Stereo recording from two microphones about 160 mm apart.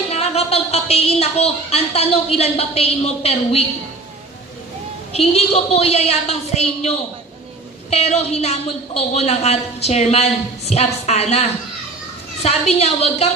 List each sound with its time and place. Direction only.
0.1 s a woman's voice: 40° left (ahead or behind)
5.1 s a woman's voice: 40° left (ahead or behind)